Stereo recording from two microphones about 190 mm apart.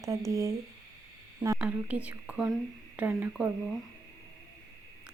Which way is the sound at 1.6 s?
5° right (ahead or behind).